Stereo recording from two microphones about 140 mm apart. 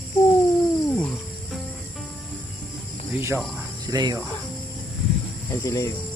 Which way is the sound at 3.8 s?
30° right (ahead or behind).